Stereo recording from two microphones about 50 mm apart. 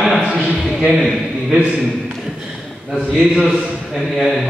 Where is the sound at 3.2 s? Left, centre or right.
Centre.